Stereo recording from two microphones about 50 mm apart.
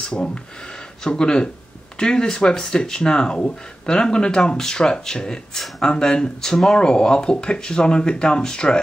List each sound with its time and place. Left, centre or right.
0.1 s speech: centre